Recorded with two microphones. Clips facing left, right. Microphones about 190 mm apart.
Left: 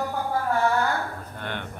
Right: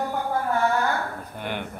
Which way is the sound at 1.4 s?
10° right (ahead or behind).